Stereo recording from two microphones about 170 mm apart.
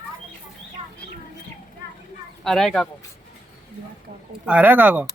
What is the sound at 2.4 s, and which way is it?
Speech, centre (ahead or behind).